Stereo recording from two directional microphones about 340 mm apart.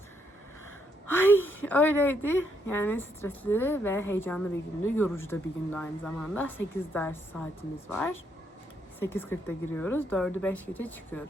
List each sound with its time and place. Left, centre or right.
1.0 s a woman's voice: centre